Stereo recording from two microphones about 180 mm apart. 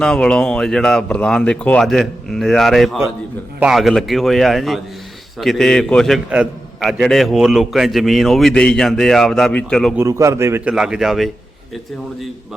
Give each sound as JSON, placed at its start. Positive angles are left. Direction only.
{"t": 0.0, "sound": "a man's voice", "side_deg": 5}
{"t": 10.0, "sound": "a man's voice", "side_deg": -15}
{"t": 10.8, "sound": "a man's voice", "side_deg": -5}